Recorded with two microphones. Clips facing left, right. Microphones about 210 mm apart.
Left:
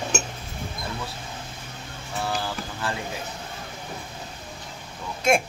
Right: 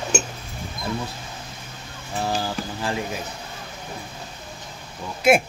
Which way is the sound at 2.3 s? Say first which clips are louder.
Right 3 dB; 20° right (ahead or behind).